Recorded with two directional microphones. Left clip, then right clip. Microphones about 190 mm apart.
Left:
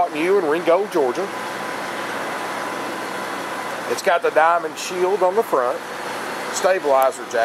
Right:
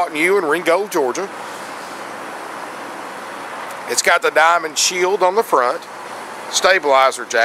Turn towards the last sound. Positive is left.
turn(degrees=-20)  # may be behind; listen again after turning